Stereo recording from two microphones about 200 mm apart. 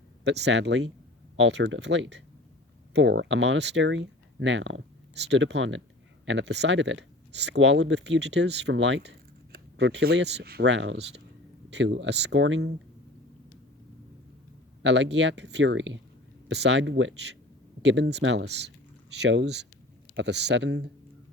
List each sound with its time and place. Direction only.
0.3 s speech: 60° right (ahead or behind)
14.8 s speech: 60° right (ahead or behind)